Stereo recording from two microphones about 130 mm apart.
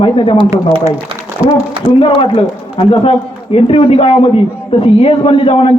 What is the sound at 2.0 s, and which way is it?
A man's voice, 40° left (ahead or behind).